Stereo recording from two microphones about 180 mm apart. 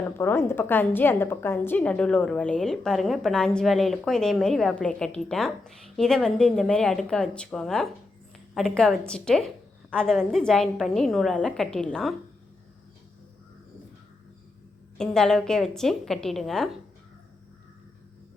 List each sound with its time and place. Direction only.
0.2 s a woman's voice: 15° left (ahead or behind)
14.9 s a woman's voice: 5° left (ahead or behind)